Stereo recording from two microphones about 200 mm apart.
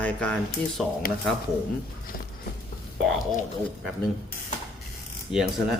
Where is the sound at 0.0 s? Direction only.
5° left (ahead or behind).